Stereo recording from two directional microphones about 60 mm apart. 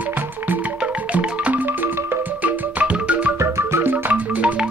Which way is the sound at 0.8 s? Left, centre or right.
Right.